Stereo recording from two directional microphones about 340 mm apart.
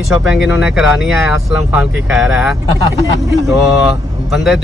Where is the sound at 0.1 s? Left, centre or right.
Centre.